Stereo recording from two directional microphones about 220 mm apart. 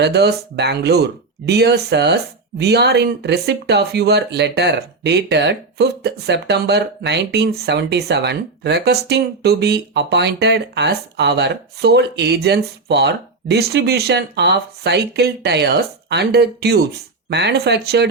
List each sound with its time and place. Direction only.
0.0 s speech: 50° right (ahead or behind)